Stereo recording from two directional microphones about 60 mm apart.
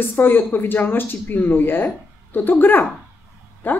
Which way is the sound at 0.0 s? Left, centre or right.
Left.